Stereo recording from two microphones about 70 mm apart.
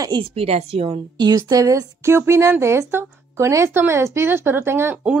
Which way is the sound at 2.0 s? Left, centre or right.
Right.